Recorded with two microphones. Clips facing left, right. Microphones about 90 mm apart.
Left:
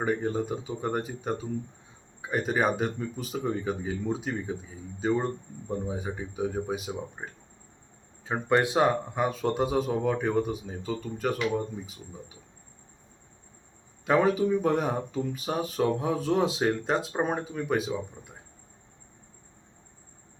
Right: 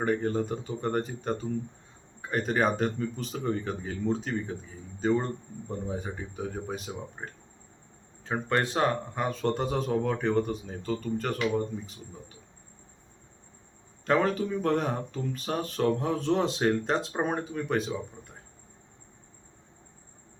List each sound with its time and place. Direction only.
0.0 s speech: 5° left (ahead or behind)
14.0 s speech: 5° left (ahead or behind)